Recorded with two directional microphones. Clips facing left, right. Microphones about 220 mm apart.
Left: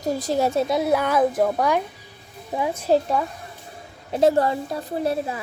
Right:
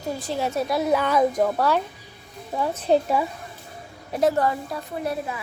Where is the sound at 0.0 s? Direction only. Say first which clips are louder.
Left 5 dB; 40° left (ahead or behind).